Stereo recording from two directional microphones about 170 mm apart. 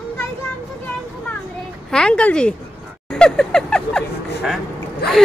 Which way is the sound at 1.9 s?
5° left (ahead or behind).